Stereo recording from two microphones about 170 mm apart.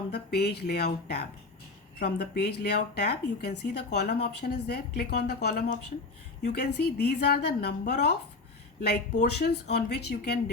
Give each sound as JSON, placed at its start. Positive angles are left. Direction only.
{"t": 0.1, "sound": "speech", "side_deg": 70}
{"t": 9.2, "sound": "speech", "side_deg": 75}